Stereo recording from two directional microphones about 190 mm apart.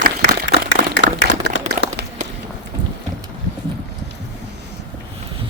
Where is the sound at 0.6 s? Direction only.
80° left.